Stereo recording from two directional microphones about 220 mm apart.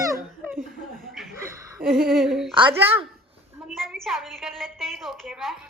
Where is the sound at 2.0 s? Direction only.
Centre (ahead or behind).